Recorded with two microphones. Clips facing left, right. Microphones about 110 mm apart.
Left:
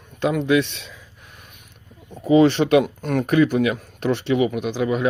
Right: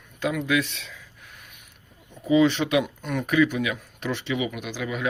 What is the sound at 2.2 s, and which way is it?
Speech, 55° left (ahead or behind).